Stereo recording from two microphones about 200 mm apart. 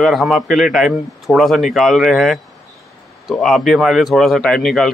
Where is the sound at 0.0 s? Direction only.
Centre (ahead or behind).